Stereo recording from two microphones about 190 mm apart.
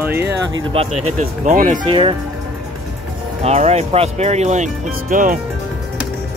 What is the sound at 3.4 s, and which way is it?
Speech, 35° right (ahead or behind).